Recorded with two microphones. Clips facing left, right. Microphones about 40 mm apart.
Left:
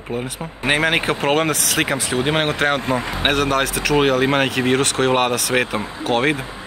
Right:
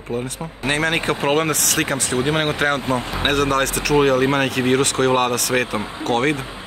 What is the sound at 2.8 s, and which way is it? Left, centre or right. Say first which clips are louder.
Speech: left 1 dB; left.